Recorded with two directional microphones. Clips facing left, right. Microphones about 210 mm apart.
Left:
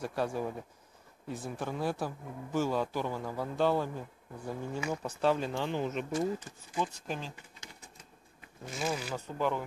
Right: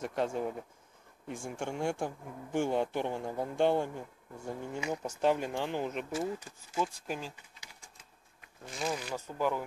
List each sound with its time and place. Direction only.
0.0 s a man's voice: 20° right (ahead or behind)
8.6 s speech: 5° left (ahead or behind)
9.1 s speech: 5° right (ahead or behind)